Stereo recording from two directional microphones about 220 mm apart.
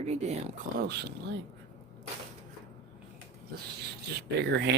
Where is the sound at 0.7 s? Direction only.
45° right (ahead or behind).